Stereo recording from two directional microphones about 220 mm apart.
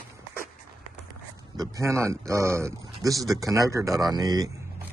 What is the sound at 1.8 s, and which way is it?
A man's voice, 15° right (ahead or behind).